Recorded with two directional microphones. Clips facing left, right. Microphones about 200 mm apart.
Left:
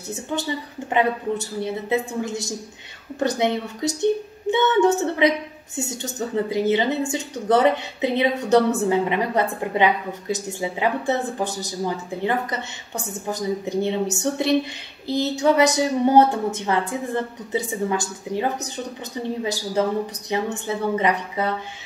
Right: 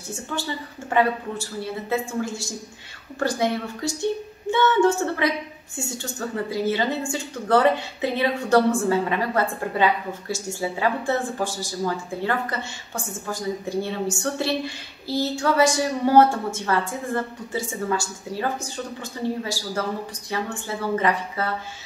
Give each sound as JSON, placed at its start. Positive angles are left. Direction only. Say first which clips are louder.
{"t": 0.1, "sound": "a woman's voice", "louder": "left 3 dB", "side_deg": 20}